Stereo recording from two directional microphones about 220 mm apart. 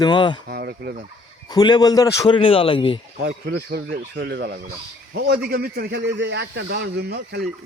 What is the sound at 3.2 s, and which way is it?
Speech, 50° right (ahead or behind).